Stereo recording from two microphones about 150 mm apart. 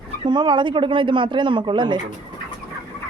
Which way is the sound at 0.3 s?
30° right (ahead or behind).